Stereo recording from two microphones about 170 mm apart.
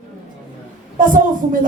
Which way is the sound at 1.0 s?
50° right (ahead or behind).